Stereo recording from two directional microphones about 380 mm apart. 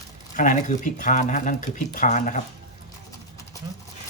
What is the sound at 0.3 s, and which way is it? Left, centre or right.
Speech, centre.